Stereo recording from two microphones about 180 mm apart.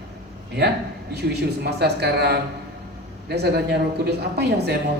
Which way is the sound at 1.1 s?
65° right (ahead or behind).